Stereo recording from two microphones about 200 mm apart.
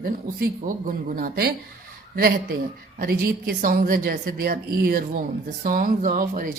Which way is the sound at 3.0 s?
50° right (ahead or behind).